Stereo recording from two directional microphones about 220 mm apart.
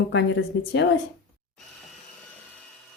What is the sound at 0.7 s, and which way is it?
Speech, 55° left (ahead or behind).